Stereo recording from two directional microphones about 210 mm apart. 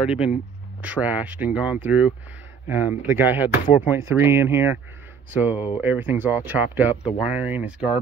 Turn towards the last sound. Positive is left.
turn(degrees=-5)  # may be behind; listen again after turning